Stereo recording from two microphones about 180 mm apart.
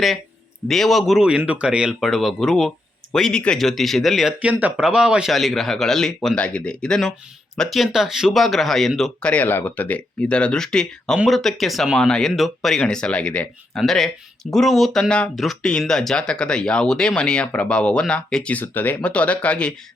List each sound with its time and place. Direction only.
0.7 s speech: centre (ahead or behind)